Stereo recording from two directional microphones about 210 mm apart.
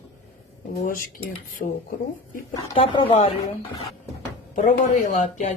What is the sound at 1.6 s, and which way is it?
Speech, 40° left (ahead or behind).